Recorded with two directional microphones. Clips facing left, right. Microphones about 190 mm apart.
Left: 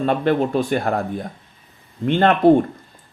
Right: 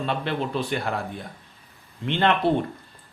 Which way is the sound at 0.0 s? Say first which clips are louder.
Left 9 dB; 45° left (ahead or behind).